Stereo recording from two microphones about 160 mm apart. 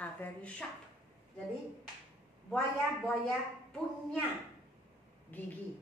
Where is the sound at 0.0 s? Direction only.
10° left (ahead or behind).